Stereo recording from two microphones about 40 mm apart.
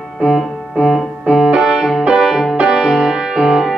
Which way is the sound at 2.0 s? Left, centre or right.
Right.